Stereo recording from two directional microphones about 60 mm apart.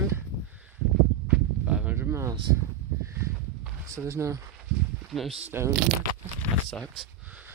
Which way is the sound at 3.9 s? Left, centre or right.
Right.